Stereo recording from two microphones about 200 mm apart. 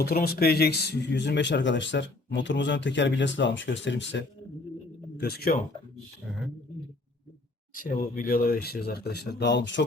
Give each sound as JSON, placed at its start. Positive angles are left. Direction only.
{"t": 0.0, "sound": "speech", "side_deg": 50}
{"t": 5.2, "sound": "speech", "side_deg": 50}
{"t": 7.8, "sound": "speech", "side_deg": 45}